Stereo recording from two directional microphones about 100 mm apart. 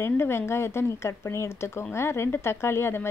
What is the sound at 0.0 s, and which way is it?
Speech, 25° left (ahead or behind).